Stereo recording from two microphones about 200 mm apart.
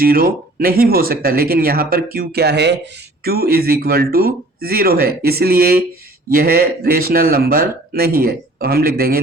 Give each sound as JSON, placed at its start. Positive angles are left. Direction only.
{"t": 0.0, "sound": "speech", "side_deg": -45}